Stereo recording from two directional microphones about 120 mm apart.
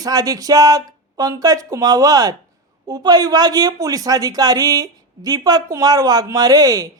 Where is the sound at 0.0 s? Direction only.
30° right (ahead or behind).